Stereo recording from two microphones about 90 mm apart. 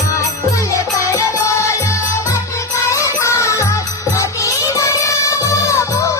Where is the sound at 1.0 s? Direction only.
35° left (ahead or behind).